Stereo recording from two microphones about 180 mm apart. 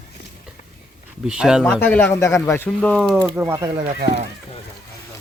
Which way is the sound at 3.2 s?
10° right (ahead or behind).